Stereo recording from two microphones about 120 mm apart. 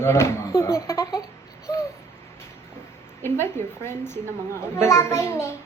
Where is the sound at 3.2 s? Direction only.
20° left (ahead or behind).